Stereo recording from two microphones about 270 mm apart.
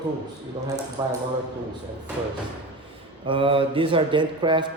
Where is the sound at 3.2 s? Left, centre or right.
Centre.